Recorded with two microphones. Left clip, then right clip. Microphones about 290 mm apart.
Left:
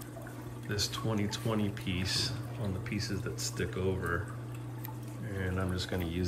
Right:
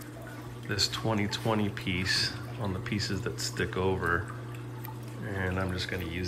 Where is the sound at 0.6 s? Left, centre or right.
Centre.